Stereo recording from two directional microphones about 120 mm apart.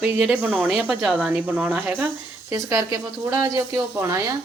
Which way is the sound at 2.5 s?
25° right (ahead or behind).